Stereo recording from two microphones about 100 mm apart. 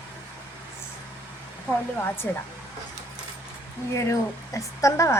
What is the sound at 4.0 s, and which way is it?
Speech, 30° left (ahead or behind).